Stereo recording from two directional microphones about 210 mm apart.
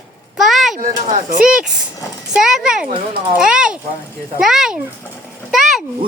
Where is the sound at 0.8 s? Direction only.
40° right (ahead or behind).